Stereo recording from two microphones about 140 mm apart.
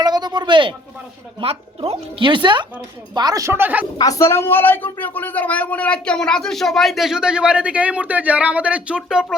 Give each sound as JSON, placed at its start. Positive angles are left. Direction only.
{"t": 0.0, "sound": "a sound", "side_deg": -30}
{"t": 1.4, "sound": "speech", "side_deg": -45}
{"t": 3.9, "sound": "speech", "side_deg": 25}